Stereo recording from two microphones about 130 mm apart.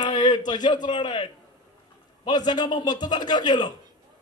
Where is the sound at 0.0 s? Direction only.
35° left (ahead or behind).